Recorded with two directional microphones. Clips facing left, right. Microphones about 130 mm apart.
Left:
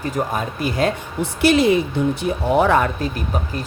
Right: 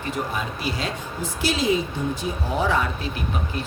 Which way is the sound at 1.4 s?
60° left (ahead or behind).